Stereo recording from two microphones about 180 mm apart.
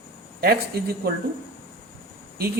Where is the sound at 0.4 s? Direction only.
60° right (ahead or behind).